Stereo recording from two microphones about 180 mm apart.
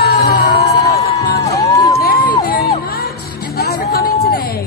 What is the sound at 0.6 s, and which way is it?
Music, 20° left (ahead or behind).